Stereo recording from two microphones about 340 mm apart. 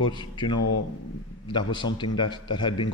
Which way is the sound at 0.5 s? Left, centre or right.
Left.